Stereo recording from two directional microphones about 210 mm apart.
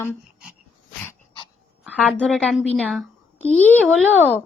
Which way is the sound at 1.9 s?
5° left (ahead or behind).